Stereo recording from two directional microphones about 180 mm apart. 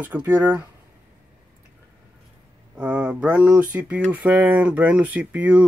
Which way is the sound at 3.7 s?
5° right (ahead or behind).